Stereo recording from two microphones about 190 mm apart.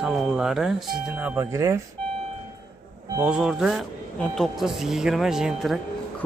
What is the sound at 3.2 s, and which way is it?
Speech, 5° right (ahead or behind).